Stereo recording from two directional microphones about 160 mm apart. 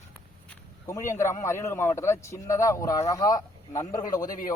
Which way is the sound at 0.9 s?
15° left (ahead or behind).